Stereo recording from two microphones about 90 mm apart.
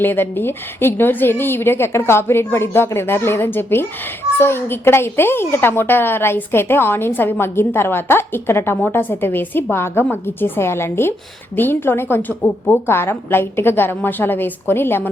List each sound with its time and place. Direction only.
0.0 s a woman's voice: 25° left (ahead or behind)